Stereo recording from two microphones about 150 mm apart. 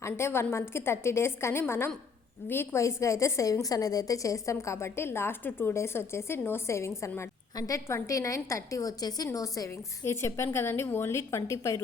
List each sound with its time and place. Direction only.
0.0 s a woman's voice: 15° left (ahead or behind)